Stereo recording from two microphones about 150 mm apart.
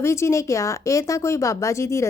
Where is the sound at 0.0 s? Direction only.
20° left (ahead or behind).